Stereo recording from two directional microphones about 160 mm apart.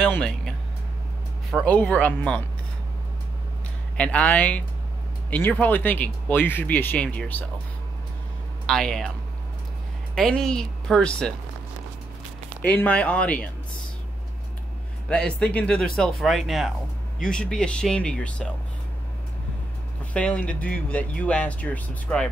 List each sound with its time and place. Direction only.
0.0 s music: 5° left (ahead or behind)
1.5 s speech: 5° left (ahead or behind)
3.9 s speech: 10° left (ahead or behind)
8.6 s speech: 5° left (ahead or behind)
10.1 s speech: 5° left (ahead or behind)
12.6 s speech: 10° left (ahead or behind)
15.0 s speech: 5° left (ahead or behind)
20.1 s speech: 5° left (ahead or behind)